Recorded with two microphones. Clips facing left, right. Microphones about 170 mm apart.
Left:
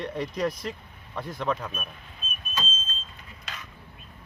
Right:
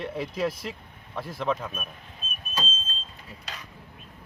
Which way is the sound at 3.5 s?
35° right (ahead or behind).